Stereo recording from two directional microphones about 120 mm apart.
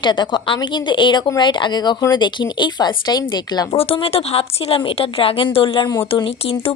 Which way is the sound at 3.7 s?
55° left (ahead or behind).